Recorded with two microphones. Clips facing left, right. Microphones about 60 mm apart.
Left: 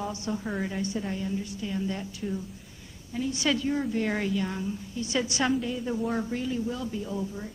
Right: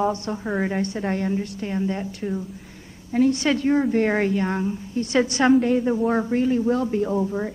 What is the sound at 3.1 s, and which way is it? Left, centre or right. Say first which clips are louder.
A woman's voice: right 9 dB; right.